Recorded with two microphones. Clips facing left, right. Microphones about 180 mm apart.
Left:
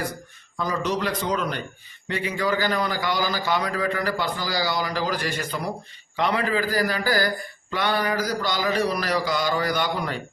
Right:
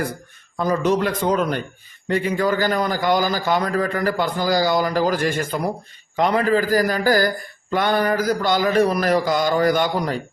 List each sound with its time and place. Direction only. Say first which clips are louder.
0.5 s a man's voice: right 7 dB; 50° right (ahead or behind)